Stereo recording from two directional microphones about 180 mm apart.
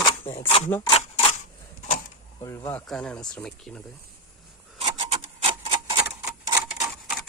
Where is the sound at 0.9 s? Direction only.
35° left (ahead or behind).